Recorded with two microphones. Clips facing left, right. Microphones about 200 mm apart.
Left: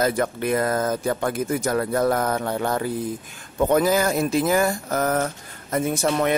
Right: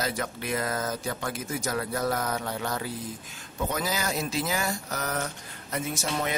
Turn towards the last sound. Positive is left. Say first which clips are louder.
# left 9 dB
turn(degrees=60)  # may be behind; listen again after turning